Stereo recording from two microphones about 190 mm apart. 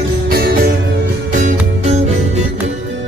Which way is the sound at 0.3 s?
55° right (ahead or behind).